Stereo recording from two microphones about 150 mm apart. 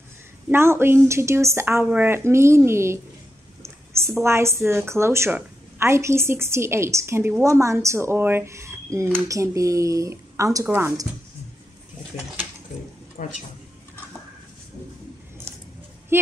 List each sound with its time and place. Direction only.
0.5 s a woman's voice: 15° right (ahead or behind)
4.2 s a woman's voice: 15° right (ahead or behind)
13.2 s speech: 65° left (ahead or behind)
16.1 s speech: 15° right (ahead or behind)